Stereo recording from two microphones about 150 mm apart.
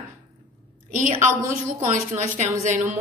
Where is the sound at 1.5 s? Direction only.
60° right (ahead or behind).